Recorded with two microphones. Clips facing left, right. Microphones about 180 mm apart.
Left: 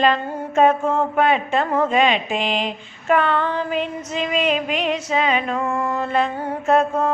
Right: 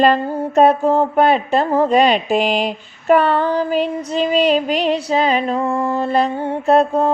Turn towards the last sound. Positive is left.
turn(degrees=-35)  # may be behind; listen again after turning